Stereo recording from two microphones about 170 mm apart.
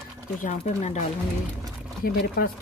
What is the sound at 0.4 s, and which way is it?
Speech, 45° left (ahead or behind).